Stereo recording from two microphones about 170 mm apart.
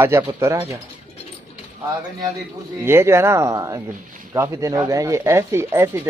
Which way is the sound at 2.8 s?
15° right (ahead or behind).